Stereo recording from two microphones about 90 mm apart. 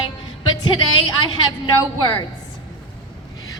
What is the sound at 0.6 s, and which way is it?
Speech, 60° left (ahead or behind).